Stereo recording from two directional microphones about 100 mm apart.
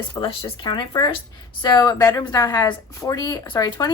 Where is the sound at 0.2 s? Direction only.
70° left (ahead or behind).